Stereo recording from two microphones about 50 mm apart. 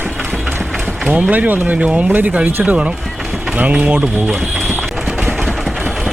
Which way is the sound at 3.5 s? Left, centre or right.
Right.